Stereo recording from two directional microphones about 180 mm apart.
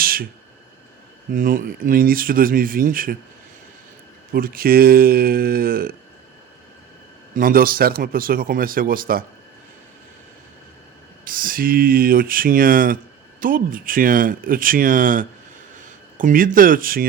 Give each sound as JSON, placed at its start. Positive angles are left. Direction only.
{"t": 0.0, "sound": "a sound", "side_deg": -55}
{"t": 1.3, "sound": "speech", "side_deg": -50}
{"t": 4.3, "sound": "speech", "side_deg": -55}
{"t": 7.3, "sound": "speech", "side_deg": -55}
{"t": 11.3, "sound": "speech", "side_deg": -50}